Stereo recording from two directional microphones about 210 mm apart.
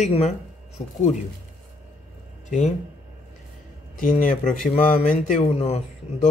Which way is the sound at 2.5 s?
35° left (ahead or behind).